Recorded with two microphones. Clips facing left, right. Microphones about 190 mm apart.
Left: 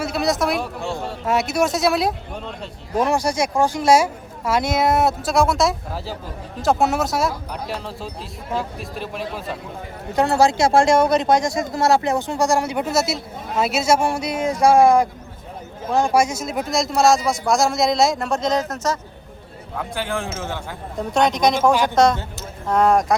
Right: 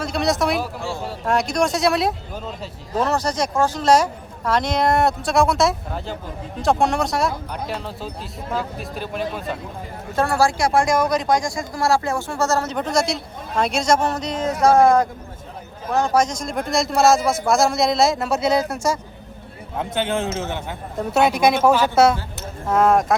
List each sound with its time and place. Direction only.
0.0 s speech: centre (ahead or behind)
3.0 s speech: 10° left (ahead or behind)
10.2 s speech: 20° left (ahead or behind); by 18.9 s 10° right (ahead or behind)
19.7 s speech: 25° right (ahead or behind)
21.0 s speech: 5° right (ahead or behind)